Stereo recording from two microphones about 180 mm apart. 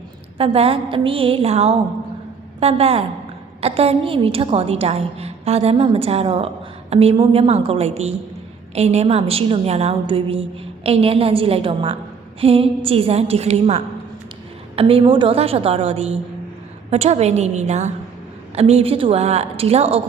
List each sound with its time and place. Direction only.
0.3 s a woman's voice: 35° right (ahead or behind)